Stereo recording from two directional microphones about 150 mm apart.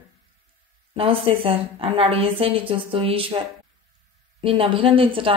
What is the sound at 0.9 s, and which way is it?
Speech, 35° right (ahead or behind).